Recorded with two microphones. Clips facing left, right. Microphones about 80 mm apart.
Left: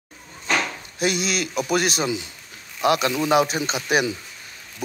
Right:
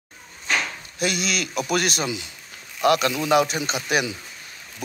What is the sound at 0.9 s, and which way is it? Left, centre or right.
A man's voice, left.